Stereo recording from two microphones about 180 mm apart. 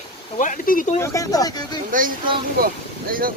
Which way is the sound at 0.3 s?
45° left (ahead or behind).